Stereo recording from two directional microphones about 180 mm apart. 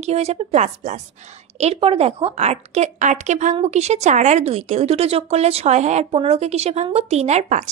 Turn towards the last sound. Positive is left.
turn(degrees=-40)  # may be behind; listen again after turning